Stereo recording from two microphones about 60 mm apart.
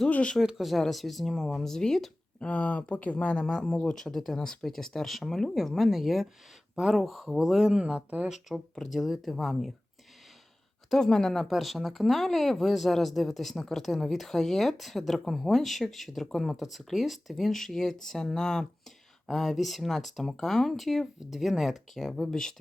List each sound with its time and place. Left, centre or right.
0.1 s speech: centre
0.4 s speech: centre
2.4 s speech: left
3.4 s speech: centre; by 8.3 s right
8.3 s speech: centre
10.8 s speech: centre